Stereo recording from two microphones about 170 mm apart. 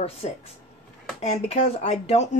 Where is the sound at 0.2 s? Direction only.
40° left (ahead or behind).